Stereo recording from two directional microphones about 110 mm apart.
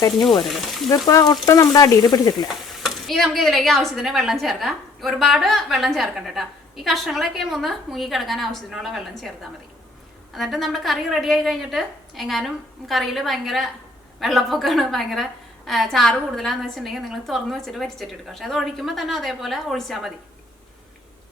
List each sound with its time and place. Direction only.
0.9 s speech: 30° left (ahead or behind)
2.8 s a woman's voice: centre (ahead or behind)